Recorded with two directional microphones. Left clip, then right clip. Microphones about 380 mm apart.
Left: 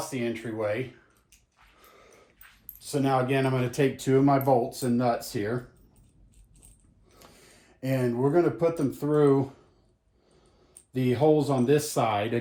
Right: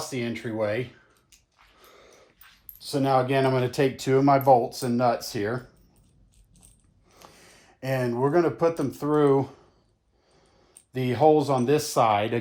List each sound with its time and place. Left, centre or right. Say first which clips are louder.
0.1 s speech: right 1 dB; right
1.8 s dog: right 2 dB; right
2.7 s speech: right 3 dB; right
7.2 s gasp: right 4 dB; centre
7.8 s speech: right 2 dB; centre
10.9 s speech: right 3 dB; centre